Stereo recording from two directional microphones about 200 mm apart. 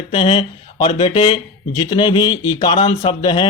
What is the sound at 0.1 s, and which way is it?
Speech, 25° left (ahead or behind).